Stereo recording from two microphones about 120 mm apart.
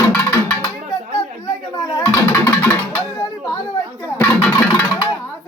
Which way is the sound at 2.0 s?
20° left (ahead or behind).